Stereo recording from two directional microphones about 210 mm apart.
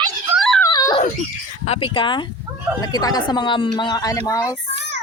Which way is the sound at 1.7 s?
25° left (ahead or behind).